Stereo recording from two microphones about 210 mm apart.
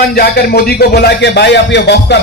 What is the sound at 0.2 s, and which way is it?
Speech, 45° left (ahead or behind).